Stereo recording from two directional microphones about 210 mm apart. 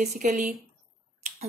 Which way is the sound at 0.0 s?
35° right (ahead or behind).